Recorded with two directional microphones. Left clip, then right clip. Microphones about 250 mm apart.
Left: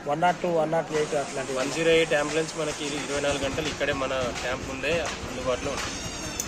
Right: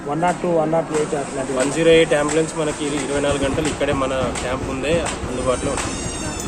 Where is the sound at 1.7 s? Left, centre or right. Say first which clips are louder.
Right 8 dB; centre.